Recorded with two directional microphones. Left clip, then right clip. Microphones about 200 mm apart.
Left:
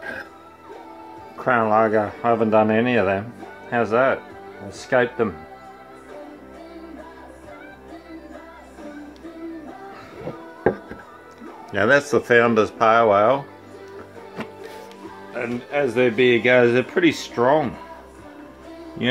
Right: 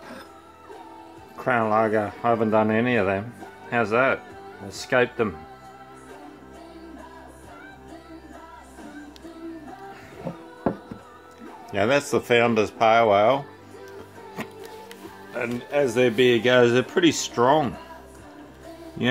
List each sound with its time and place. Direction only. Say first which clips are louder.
1.4 s speech: left 4 dB; 10° right (ahead or behind)
11.7 s a man's voice: left 4 dB; 5° right (ahead or behind)
15.3 s speech: even; 15° right (ahead or behind)